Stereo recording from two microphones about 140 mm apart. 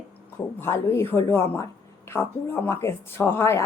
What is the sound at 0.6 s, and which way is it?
A woman's voice, 15° left (ahead or behind).